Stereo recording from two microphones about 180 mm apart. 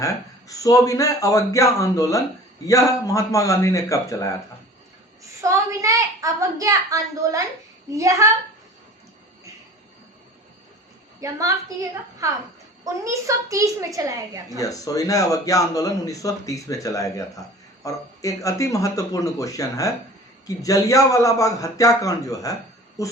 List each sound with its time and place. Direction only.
0.0 s a man's voice: 20° left (ahead or behind)
5.4 s a woman's voice: 15° right (ahead or behind)
11.2 s a woman's voice: 20° right (ahead or behind)
14.6 s a man's voice: 20° left (ahead or behind)